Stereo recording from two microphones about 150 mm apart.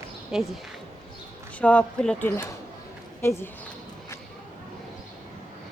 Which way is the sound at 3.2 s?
20° left (ahead or behind).